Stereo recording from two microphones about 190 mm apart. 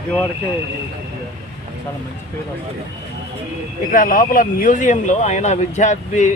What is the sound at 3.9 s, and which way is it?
Speech, 45° left (ahead or behind).